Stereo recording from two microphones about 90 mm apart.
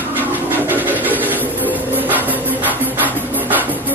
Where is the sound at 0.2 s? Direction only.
20° right (ahead or behind).